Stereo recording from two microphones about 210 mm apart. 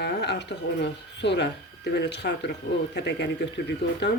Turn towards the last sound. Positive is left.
turn(degrees=55)  # may be behind; listen again after turning